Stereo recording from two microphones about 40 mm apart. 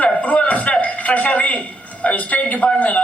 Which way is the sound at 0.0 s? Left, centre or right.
Left.